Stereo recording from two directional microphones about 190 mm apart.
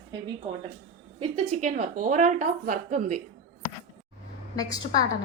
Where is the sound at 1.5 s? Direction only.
40° right (ahead or behind).